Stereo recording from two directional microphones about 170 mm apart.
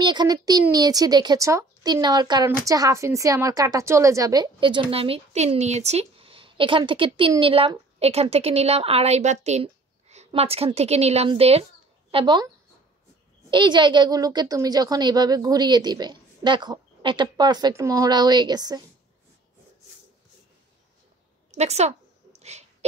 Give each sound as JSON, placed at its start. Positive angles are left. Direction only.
{"t": 0.0, "sound": "a woman's voice", "side_deg": -25}
{"t": 13.5, "sound": "speech", "side_deg": -25}
{"t": 21.5, "sound": "a sound", "side_deg": -40}